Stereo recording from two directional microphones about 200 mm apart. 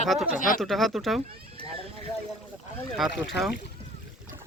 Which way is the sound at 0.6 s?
Centre (ahead or behind).